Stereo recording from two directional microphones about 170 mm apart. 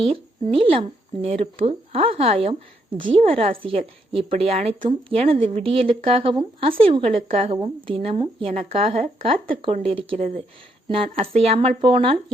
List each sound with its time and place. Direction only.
0.0 s speech: 30° right (ahead or behind)